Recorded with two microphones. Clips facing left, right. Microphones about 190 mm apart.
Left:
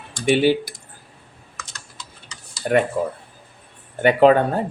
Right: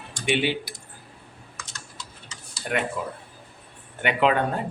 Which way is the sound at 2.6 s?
40° left (ahead or behind).